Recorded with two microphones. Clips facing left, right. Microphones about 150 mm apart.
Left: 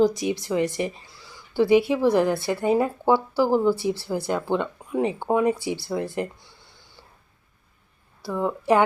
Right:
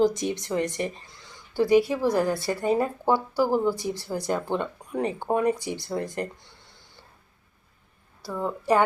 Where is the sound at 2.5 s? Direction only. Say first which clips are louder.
Left 2 dB; 10° left (ahead or behind).